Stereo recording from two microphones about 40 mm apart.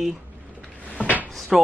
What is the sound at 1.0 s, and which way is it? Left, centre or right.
Drawer open or close, right.